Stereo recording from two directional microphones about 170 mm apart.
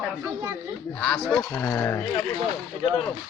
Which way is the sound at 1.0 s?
5° left (ahead or behind).